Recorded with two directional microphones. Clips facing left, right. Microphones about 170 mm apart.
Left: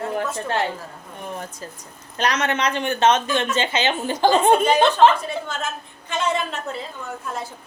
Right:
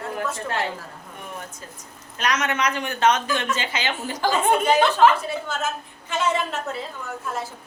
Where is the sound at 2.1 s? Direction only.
30° left (ahead or behind).